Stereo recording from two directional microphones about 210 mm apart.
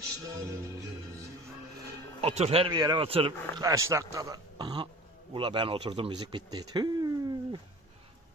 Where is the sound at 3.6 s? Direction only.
15° right (ahead or behind).